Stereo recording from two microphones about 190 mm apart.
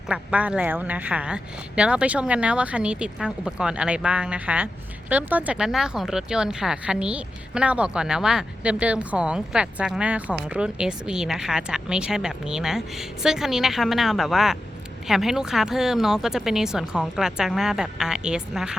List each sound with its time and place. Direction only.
0.1 s speech: 5° right (ahead or behind)